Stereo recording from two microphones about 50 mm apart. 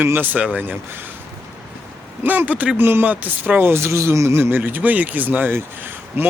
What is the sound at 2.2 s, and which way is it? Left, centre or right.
Speech, right.